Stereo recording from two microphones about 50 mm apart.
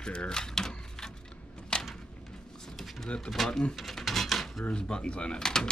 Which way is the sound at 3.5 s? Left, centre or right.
Centre.